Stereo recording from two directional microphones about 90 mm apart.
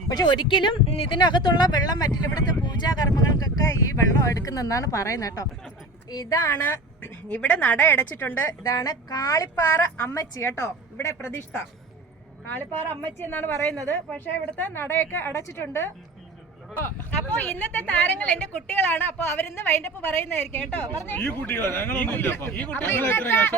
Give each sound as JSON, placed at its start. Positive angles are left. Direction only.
{"t": 0.1, "sound": "a woman's voice", "side_deg": 50}
{"t": 12.5, "sound": "a woman's voice", "side_deg": 25}